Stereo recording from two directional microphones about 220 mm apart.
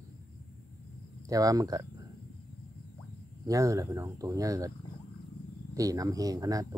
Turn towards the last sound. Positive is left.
turn(degrees=-15)  # may be behind; listen again after turning